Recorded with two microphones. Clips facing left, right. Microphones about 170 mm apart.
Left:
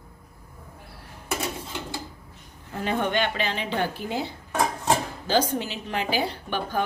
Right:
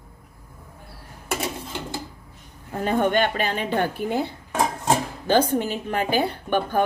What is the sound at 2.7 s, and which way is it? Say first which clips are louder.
A woman's voice: right 5 dB; 45° right (ahead or behind).